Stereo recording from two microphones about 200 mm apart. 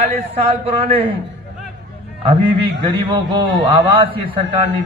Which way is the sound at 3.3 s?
25° right (ahead or behind).